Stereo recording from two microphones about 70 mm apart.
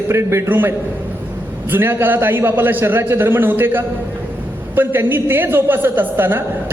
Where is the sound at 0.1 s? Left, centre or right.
Right.